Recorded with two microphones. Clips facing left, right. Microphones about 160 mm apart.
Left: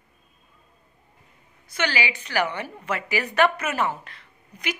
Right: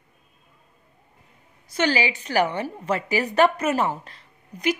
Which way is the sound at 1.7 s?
40° right (ahead or behind).